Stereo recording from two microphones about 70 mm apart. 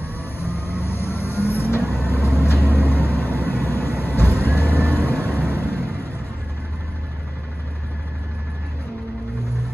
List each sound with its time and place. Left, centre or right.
0.0 s music: left
2.9 s vehicle: left